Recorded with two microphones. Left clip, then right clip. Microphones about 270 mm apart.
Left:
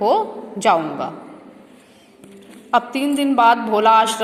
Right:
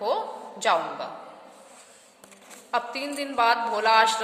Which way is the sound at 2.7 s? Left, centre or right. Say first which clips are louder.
Left 10 dB; centre.